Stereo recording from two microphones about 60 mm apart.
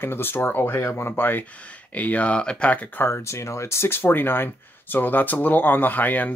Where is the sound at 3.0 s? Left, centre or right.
Left.